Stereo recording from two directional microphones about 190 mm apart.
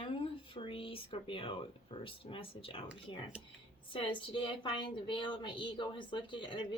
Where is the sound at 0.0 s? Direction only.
30° left (ahead or behind).